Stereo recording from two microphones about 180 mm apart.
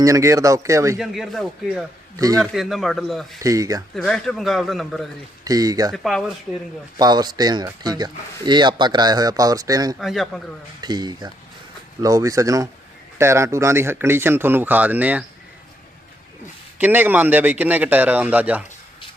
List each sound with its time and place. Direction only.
0.0 s speech: 15° right (ahead or behind)
0.9 s a man's voice: centre (ahead or behind)
2.1 s speech: 20° right (ahead or behind)
2.4 s a man's voice: centre (ahead or behind)
3.4 s speech: 20° right (ahead or behind)
3.9 s a man's voice: 5° left (ahead or behind)
5.5 s speech: 20° right (ahead or behind)
5.9 s a man's voice: centre (ahead or behind)
7.0 s speech: 20° right (ahead or behind)
10.0 s a man's voice: centre (ahead or behind)
10.8 s speech: 25° right (ahead or behind)
16.7 s speech: 10° right (ahead or behind)